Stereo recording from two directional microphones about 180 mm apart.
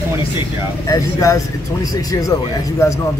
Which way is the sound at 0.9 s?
20° left (ahead or behind).